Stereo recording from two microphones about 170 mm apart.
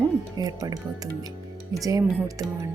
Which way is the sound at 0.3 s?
20° right (ahead or behind).